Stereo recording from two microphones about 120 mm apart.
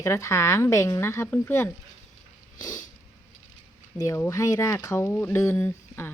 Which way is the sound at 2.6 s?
30° left (ahead or behind).